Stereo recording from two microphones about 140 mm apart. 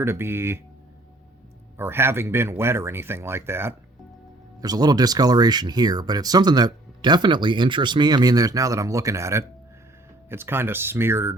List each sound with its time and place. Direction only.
0.0 s speech: 15° right (ahead or behind)
1.8 s speech: 15° right (ahead or behind)
4.6 s speech: 30° right (ahead or behind)